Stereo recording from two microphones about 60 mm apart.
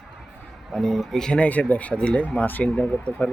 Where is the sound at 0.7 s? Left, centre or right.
Centre.